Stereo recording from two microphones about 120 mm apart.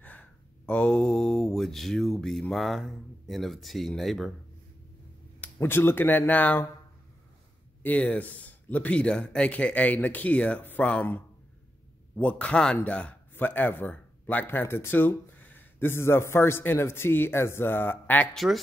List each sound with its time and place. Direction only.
0.0 s speech: 10° left (ahead or behind)
5.4 s a man's voice: 20° left (ahead or behind)
7.8 s a man's voice: 10° left (ahead or behind)
18.3 s speech: centre (ahead or behind)